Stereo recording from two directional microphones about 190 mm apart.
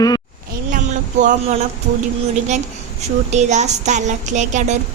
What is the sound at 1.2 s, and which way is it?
Speech, 40° right (ahead or behind).